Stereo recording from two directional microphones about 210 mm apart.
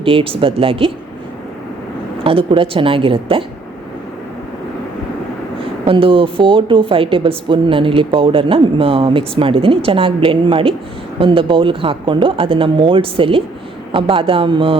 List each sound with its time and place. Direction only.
0.0 s a woman's voice: 25° right (ahead or behind)
2.2 s a woman's voice: 25° right (ahead or behind)
5.8 s a woman's voice: 25° right (ahead or behind)